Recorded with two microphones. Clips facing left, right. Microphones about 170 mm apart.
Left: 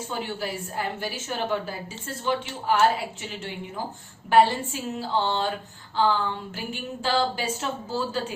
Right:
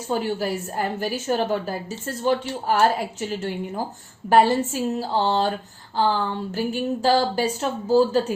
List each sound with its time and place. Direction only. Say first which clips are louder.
0.1 s a woman's voice: right 9 dB; 40° right (ahead or behind)